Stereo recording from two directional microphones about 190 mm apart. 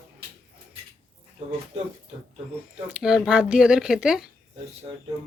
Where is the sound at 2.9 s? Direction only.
5° right (ahead or behind).